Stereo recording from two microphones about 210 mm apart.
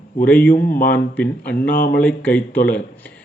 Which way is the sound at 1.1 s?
5° left (ahead or behind).